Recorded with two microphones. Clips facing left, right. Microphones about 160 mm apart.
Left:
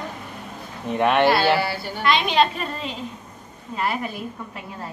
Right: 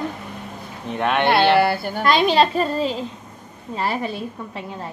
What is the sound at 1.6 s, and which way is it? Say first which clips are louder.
A woman's voice: right 5 dB; 50° right (ahead or behind).